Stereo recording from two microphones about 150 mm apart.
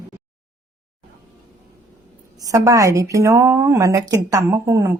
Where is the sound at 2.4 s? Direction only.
20° right (ahead or behind).